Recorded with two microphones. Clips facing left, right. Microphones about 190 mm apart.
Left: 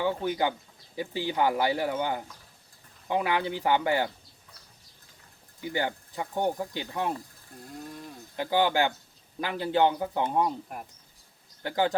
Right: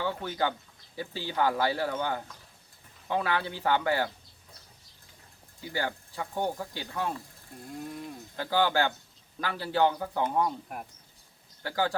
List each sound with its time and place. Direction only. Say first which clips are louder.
0.0 s speech: left 3 dB; 15° left (ahead or behind)
5.5 s speech: left 3 dB; 20° left (ahead or behind)
8.4 s speech: left 2 dB; 15° left (ahead or behind)
10.7 s speech: even; centre (ahead or behind)
11.6 s speech: left 3 dB; 20° left (ahead or behind)